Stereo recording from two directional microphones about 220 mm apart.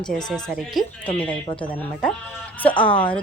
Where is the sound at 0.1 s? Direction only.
Centre (ahead or behind).